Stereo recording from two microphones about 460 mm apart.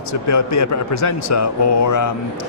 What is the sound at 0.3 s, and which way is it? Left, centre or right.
Speech, left.